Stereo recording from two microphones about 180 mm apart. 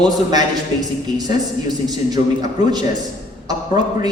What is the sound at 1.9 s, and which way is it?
Speech, 20° right (ahead or behind).